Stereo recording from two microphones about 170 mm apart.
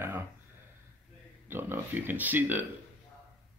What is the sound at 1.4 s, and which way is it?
Speech, 15° right (ahead or behind).